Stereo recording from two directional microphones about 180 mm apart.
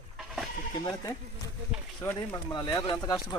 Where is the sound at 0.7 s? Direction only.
20° left (ahead or behind).